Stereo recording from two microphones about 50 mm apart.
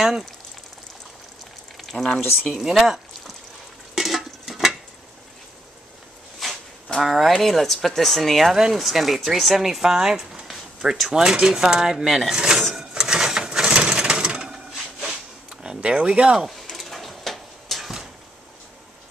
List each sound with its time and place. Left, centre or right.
1.8 s a sound: centre
2.5 s speech: centre
3.9 s stir: centre
6.4 s a sound: centre
7.0 s speech: centre
12.4 s drawer open or close: centre
12.7 s sewing machine: centre
16.4 s drawer open or close: centre